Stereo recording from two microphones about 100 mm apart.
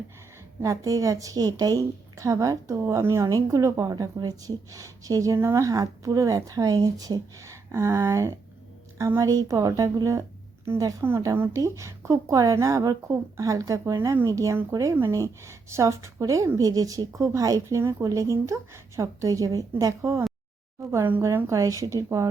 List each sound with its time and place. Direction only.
0.6 s a woman's voice: 35° right (ahead or behind)